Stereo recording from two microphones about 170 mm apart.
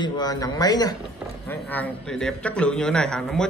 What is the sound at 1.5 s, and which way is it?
A man's voice, 10° left (ahead or behind).